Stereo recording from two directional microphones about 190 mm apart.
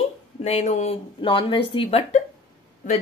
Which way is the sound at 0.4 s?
35° left (ahead or behind).